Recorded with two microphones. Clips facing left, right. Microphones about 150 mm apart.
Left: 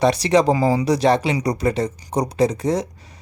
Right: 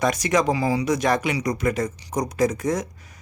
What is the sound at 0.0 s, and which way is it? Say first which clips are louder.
Speech: left 5 dB; 30° left (ahead or behind).